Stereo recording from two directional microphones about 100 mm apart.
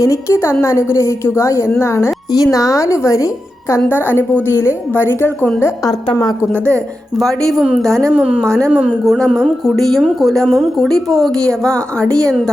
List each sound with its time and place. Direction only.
0.0 s a woman's voice: 30° left (ahead or behind)
4.1 s a woman's voice: 20° left (ahead or behind)
7.2 s a woman's voice: centre (ahead or behind)
8.1 s a woman's voice: 10° right (ahead or behind)
9.1 s a woman's voice: 5° left (ahead or behind)